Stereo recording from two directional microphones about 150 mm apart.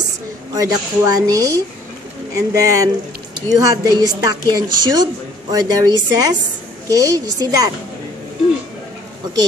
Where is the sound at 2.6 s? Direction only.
25° right (ahead or behind).